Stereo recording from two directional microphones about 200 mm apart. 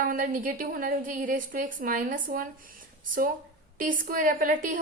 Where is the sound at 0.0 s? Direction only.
45° right (ahead or behind).